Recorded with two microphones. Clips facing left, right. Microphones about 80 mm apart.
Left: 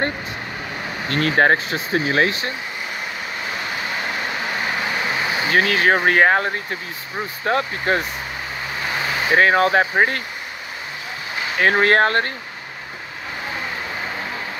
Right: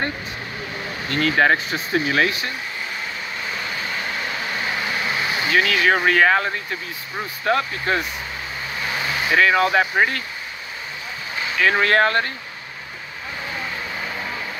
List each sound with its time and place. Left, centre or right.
1.0 s speech: left
4.5 s vehicle: left
5.5 s speech: left
11.5 s speech: left